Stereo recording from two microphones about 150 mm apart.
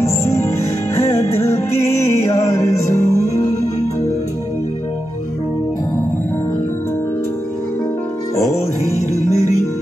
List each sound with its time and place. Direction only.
0.0 s music: 20° left (ahead or behind)
1.1 s music: 45° left (ahead or behind)
2.4 s music: 20° left (ahead or behind)